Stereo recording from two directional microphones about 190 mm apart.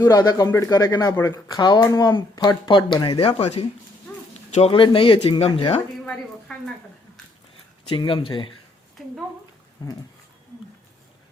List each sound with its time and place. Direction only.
0.0 s speech: 20° left (ahead or behind)
6.5 s a sound: 5° left (ahead or behind)
7.9 s speech: 25° left (ahead or behind)